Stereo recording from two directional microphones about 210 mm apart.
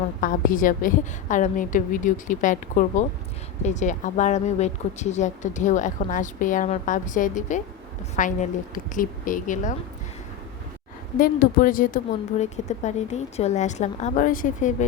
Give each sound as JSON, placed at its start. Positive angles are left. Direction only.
{"t": 0.2, "sound": "speech", "side_deg": 40}
{"t": 11.2, "sound": "speech", "side_deg": 40}